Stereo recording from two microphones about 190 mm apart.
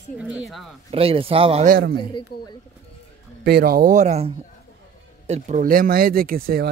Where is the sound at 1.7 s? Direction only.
55° right (ahead or behind).